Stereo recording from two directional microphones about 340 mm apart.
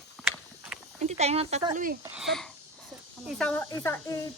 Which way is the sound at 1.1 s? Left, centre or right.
Centre.